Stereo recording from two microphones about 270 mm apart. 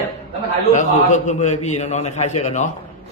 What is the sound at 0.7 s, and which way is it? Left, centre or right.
A man's voice, left.